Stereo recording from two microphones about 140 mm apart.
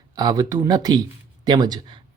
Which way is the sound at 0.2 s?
25° right (ahead or behind).